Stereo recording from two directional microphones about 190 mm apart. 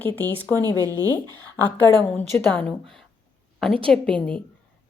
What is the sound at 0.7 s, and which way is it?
Speech, 20° right (ahead or behind).